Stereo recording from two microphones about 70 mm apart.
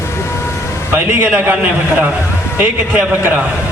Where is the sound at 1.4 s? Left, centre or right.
Right.